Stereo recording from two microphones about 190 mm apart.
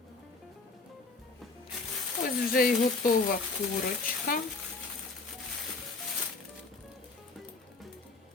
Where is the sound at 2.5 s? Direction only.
50° left (ahead or behind).